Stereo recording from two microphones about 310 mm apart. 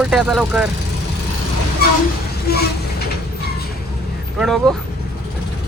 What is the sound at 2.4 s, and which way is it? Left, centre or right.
Vehicle, left.